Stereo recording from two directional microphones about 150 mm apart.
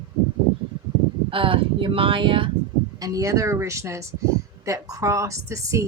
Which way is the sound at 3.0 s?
20° right (ahead or behind).